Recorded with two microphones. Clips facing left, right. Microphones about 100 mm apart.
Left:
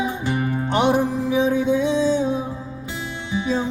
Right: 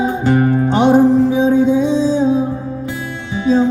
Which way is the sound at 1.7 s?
60° left (ahead or behind).